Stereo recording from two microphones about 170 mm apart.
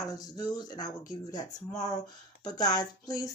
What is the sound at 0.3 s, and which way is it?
A woman's voice, 25° left (ahead or behind).